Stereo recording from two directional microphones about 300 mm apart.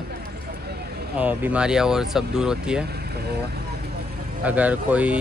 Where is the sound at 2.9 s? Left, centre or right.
Right.